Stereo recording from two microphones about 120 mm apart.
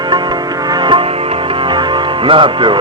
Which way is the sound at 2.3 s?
45° right (ahead or behind).